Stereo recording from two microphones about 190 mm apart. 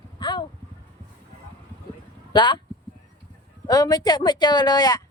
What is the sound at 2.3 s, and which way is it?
Speech, 25° left (ahead or behind).